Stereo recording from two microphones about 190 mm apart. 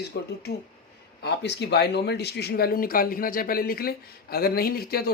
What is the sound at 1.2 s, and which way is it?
Speech, 65° left (ahead or behind).